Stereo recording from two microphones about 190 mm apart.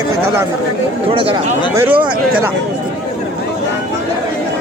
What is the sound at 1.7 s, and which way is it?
Speech, 10° right (ahead or behind).